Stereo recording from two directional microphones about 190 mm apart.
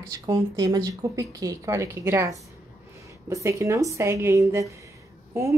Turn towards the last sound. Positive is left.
turn(degrees=-15)  # may be behind; listen again after turning